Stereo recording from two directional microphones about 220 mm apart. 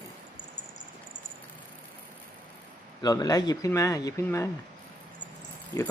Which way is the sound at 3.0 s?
15° left (ahead or behind).